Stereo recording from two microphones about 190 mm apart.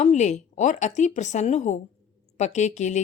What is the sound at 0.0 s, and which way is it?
A woman's voice, 40° left (ahead or behind).